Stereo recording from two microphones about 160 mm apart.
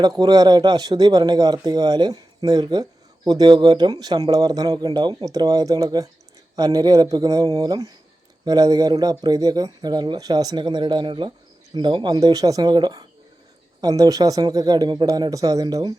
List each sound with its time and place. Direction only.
0.2 s speech: 25° right (ahead or behind)